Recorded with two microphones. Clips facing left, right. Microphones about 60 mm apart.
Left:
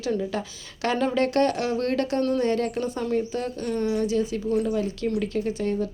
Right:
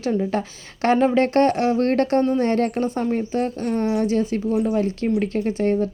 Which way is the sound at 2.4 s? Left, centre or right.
Right.